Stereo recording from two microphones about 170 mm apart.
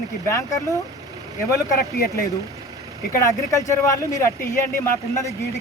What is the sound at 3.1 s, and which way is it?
Speech, 15° left (ahead or behind).